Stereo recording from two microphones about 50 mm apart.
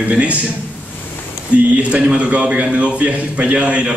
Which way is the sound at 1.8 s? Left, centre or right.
Right.